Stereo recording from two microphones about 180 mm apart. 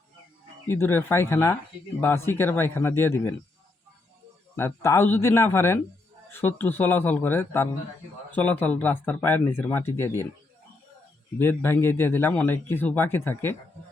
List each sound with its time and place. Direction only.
0.7 s speech: 15° left (ahead or behind)
4.5 s speech: 15° left (ahead or behind)
11.3 s speech: 10° left (ahead or behind)